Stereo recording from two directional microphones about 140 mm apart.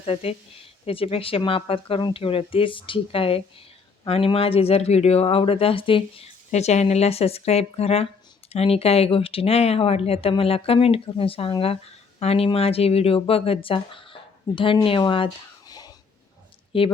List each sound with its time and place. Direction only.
0.0 s speech: 45° left (ahead or behind); by 15.9 s 30° left (ahead or behind)
16.7 s speech: 40° left (ahead or behind)